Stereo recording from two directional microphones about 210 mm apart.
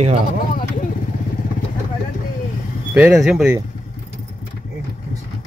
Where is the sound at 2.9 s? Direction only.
5° right (ahead or behind).